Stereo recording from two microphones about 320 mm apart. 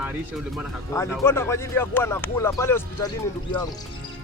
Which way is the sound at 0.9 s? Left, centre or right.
Centre.